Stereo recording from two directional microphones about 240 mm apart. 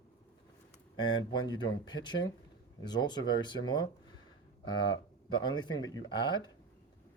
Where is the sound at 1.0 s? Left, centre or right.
Centre.